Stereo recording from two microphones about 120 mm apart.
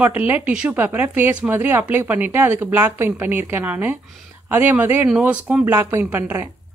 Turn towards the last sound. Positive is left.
turn(degrees=-15)  # may be behind; listen again after turning